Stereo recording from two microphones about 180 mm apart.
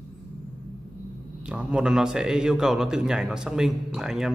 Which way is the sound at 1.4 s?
5° right (ahead or behind).